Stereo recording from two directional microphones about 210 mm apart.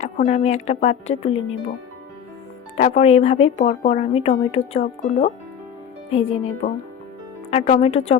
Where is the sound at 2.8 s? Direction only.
30° left (ahead or behind).